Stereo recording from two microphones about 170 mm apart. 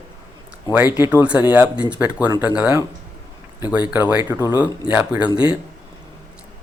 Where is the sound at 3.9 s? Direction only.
10° right (ahead or behind).